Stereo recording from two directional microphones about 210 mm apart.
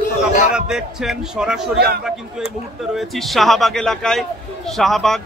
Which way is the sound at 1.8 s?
50° right (ahead or behind).